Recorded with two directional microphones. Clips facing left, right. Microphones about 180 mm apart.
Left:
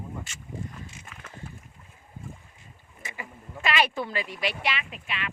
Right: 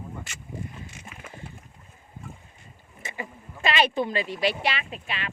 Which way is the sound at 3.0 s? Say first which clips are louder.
Right 4 dB; 25° right (ahead or behind).